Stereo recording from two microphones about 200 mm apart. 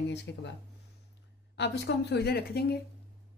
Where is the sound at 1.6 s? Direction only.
60° left (ahead or behind).